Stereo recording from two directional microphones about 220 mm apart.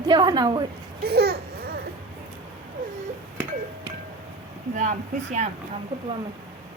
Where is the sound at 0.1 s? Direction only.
20° right (ahead or behind).